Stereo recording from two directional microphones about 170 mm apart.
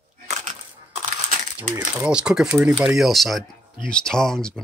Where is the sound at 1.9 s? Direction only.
5° right (ahead or behind).